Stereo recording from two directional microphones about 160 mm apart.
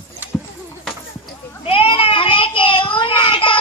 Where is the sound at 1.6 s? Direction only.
35° left (ahead or behind).